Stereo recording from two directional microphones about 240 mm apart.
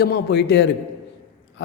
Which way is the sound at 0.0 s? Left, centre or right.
Left.